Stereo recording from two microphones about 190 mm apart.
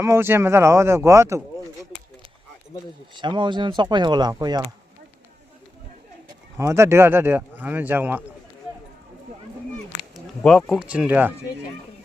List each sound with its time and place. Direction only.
0.0 s speech: 15° right (ahead or behind)
3.2 s speech: 25° right (ahead or behind)
6.6 s speech: 15° right (ahead or behind)
10.0 s a sound: centre (ahead or behind)
10.8 s speech: 5° right (ahead or behind)